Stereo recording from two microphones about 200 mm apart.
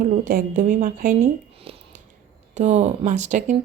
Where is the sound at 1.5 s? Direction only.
30° right (ahead or behind).